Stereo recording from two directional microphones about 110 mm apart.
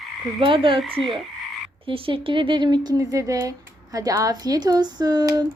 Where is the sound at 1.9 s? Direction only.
55° right (ahead or behind).